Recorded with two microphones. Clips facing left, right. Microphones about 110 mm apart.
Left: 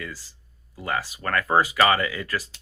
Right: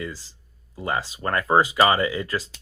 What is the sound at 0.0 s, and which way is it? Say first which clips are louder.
Speech: right 4 dB; 20° right (ahead or behind).